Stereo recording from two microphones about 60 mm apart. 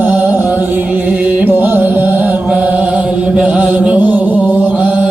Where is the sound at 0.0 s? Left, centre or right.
Right.